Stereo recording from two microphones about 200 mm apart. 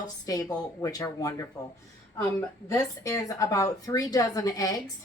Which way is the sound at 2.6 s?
15° left (ahead or behind).